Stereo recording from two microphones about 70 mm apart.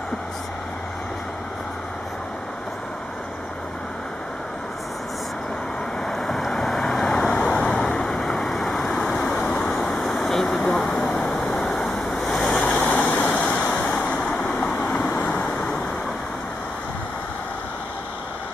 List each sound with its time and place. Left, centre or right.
6.0 s vehicle: centre
12.9 s vehicle: centre
13.2 s a sound: centre
13.9 s vehicle: centre
14.2 s vehicle: centre